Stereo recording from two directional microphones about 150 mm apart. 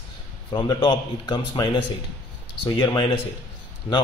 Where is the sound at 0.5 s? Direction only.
30° left (ahead or behind).